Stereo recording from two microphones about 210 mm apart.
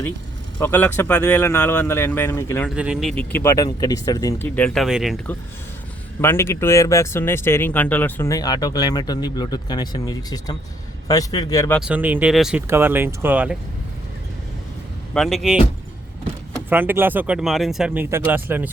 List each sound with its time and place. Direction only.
0.6 s speech: 10° left (ahead or behind)
2.6 s speech: 5° right (ahead or behind); by 4.4 s 15° left (ahead or behind)
4.4 s speech: 5° left (ahead or behind)
11.8 s speech: 5° right (ahead or behind)
15.1 s speech: centre (ahead or behind)
16.6 s speech: 10° right (ahead or behind)